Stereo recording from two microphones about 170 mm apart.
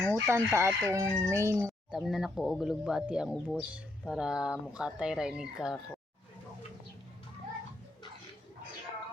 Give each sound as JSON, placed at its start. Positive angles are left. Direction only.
{"t": 0.0, "sound": "crowing", "side_deg": -15}
{"t": 1.9, "sound": "speech", "side_deg": 0}